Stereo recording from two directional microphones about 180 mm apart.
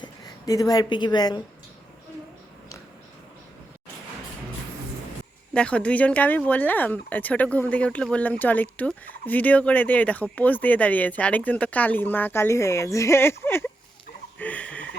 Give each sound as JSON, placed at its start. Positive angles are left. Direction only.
{"t": 0.0, "sound": "a woman's voice", "side_deg": 20}
{"t": 5.5, "sound": "speech", "side_deg": 5}